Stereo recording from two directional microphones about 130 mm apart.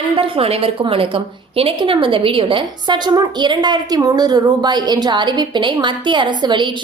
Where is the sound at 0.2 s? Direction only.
50° right (ahead or behind).